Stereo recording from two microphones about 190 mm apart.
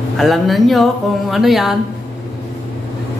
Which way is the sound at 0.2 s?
Centre (ahead or behind).